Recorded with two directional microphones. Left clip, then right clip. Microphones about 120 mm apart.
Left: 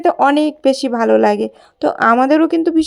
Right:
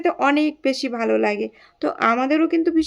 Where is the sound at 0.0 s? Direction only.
45° left (ahead or behind).